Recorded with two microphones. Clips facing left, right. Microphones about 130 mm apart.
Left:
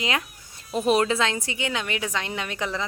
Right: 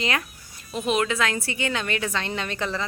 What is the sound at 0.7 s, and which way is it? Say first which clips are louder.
A woman's voice: left 3 dB; 35° left (ahead or behind).